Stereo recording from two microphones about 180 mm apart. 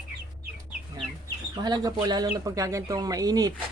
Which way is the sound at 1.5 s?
20° right (ahead or behind).